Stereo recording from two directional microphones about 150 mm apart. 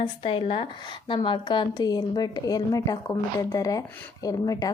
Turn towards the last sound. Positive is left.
turn(degrees=25)  # may be behind; listen again after turning